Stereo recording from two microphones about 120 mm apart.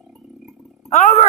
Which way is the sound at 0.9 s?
90° left.